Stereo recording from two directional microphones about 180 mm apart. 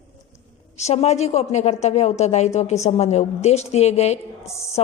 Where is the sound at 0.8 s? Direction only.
35° left (ahead or behind).